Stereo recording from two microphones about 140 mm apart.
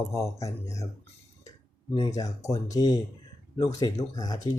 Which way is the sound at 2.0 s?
25° left (ahead or behind).